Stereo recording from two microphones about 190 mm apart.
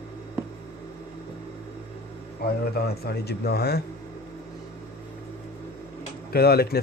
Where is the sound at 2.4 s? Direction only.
55° left (ahead or behind).